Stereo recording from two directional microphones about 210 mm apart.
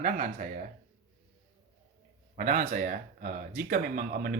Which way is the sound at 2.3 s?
40° right (ahead or behind).